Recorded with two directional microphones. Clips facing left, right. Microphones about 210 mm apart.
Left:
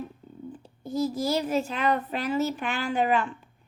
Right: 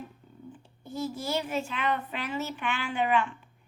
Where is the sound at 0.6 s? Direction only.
40° left (ahead or behind).